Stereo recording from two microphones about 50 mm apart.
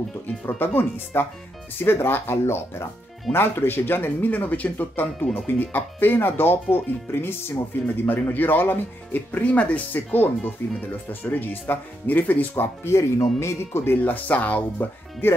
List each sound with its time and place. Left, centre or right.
0.6 s speech: left
12.8 s speech: left
14.0 s speech: left